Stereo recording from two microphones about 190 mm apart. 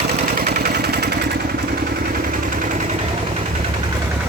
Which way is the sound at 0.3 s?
55° right (ahead or behind).